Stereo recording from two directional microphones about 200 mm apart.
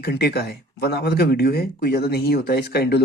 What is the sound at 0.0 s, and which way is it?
Speech, 55° left (ahead or behind).